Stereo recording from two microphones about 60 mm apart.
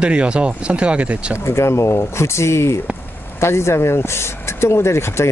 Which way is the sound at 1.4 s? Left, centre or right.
Left.